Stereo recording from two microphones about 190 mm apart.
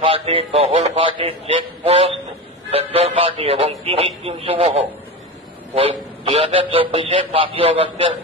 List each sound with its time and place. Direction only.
0.0 s a man's voice: 30° right (ahead or behind)
5.8 s a man's voice: 30° right (ahead or behind)